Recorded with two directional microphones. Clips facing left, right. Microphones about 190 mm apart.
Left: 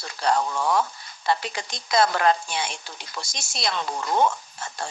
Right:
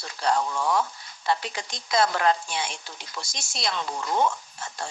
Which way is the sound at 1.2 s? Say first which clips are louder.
Left 2 dB; 70° left (ahead or behind).